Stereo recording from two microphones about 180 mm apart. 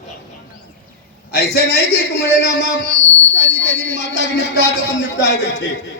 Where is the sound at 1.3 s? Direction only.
60° left (ahead or behind).